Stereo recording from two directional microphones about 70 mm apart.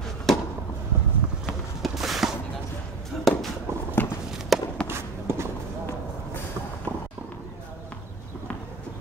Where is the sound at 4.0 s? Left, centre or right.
Left.